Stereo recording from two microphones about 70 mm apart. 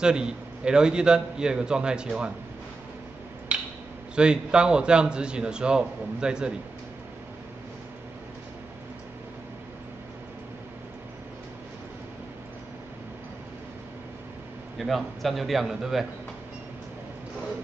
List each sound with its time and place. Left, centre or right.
0.0 s a man's voice: centre
3.5 s a sound: centre
4.1 s a man's voice: centre
14.8 s a man's voice: centre